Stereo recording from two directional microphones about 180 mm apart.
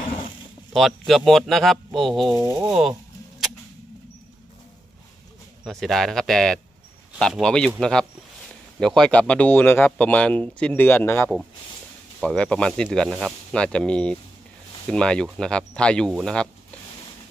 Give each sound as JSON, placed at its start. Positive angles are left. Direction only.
{"t": 0.7, "sound": "speech", "side_deg": 0}
{"t": 2.3, "sound": "a sound", "side_deg": -20}
{"t": 2.6, "sound": "keys jangling", "side_deg": -5}
{"t": 5.6, "sound": "speech", "side_deg": 0}